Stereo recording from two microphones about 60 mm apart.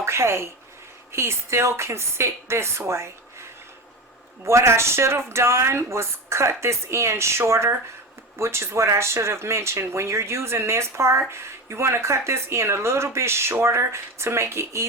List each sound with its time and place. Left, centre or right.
0.0 s a woman's voice: right
4.4 s speech: right